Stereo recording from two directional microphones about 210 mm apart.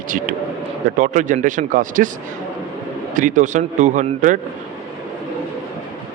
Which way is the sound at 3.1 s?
35° right (ahead or behind).